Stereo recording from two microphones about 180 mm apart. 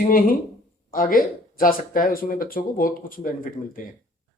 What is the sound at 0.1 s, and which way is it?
Speech, 50° left (ahead or behind).